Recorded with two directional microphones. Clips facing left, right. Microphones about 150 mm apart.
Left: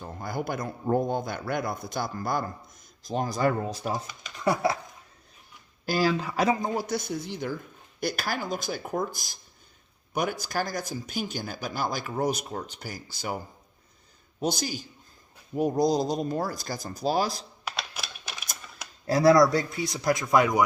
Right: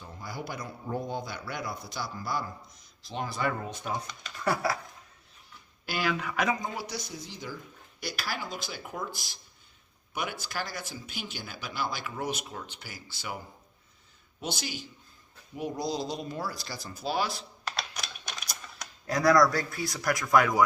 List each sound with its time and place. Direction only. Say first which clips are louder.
0.0 s speech: left 7 dB; 50° left (ahead or behind); by 3.9 s 35° left (ahead or behind)
3.9 s speech: left 2 dB; 5° left (ahead or behind)
4.4 s speech: left 4 dB; 20° left (ahead or behind)
5.8 s speech: left 6 dB; 35° left (ahead or behind)
14.4 s speech: left 7 dB; 40° left (ahead or behind)
17.7 s typing: left 1 dB; 5° left (ahead or behind)
19.0 s speech: left 4 dB; 30° left (ahead or behind)